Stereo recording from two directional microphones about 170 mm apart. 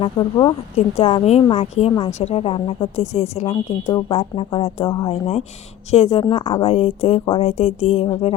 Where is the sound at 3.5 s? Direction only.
25° left (ahead or behind).